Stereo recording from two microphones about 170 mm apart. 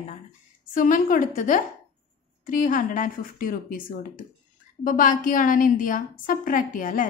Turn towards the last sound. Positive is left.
turn(degrees=50)  # may be behind; listen again after turning